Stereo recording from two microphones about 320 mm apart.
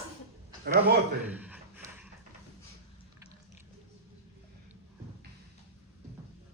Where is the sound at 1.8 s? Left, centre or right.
Centre.